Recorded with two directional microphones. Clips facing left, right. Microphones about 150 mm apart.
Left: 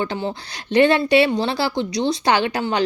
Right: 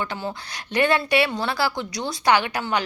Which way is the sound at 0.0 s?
25° left (ahead or behind).